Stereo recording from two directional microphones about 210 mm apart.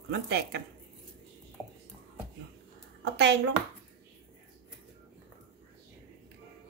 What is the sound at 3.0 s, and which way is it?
Speech, 55° right (ahead or behind).